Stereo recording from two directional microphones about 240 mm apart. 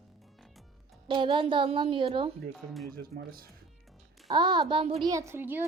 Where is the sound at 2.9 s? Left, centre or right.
Right.